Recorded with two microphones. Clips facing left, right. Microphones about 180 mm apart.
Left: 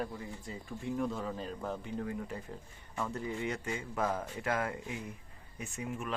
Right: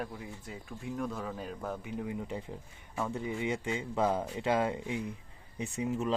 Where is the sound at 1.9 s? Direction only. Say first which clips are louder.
Right 1 dB; 15° right (ahead or behind).